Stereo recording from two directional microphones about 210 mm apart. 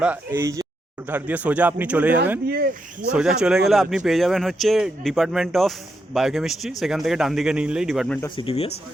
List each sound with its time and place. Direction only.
0.0 s speech: 10° right (ahead or behind)
2.5 s speech: 45° right (ahead or behind)
3.1 s speech: 5° right (ahead or behind)
8.4 s speech: 30° left (ahead or behind)